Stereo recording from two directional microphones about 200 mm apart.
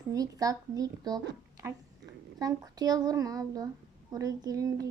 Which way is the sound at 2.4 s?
20° right (ahead or behind).